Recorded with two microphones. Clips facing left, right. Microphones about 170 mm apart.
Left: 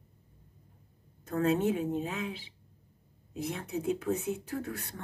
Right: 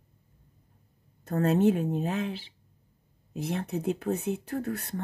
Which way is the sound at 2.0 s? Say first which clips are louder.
Right 5 dB; 55° right (ahead or behind).